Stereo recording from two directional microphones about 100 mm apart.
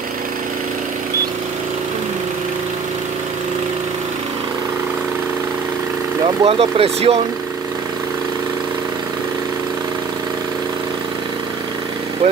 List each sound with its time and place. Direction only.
6.4 s speech: 85° right